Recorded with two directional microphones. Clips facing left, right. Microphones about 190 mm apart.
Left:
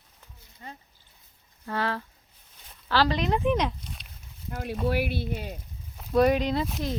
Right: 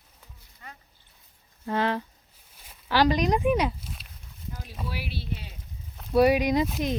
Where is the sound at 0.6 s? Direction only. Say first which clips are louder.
Left 4 dB; 25° left (ahead or behind).